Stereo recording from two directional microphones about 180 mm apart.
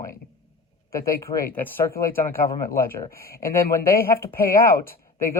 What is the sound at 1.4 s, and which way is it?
Speech, 10° left (ahead or behind).